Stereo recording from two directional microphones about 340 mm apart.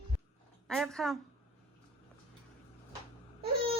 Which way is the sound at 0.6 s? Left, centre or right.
Centre.